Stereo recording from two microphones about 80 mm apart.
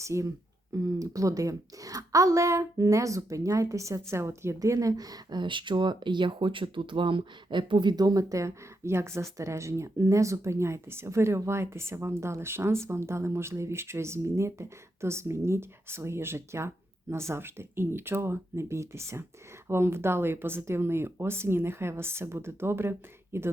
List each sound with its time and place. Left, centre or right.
0.0 s a woman's voice: right
5.4 s speech: right